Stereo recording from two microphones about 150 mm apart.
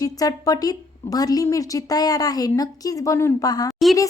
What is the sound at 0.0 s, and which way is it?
A woman's voice, 25° left (ahead or behind).